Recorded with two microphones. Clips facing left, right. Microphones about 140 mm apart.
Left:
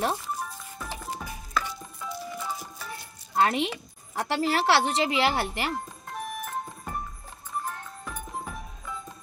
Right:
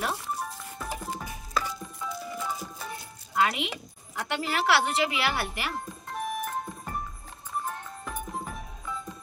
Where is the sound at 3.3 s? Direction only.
35° left (ahead or behind).